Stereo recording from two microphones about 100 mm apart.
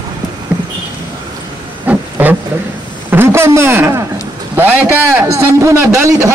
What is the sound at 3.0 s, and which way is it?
A man's voice, 25° right (ahead or behind).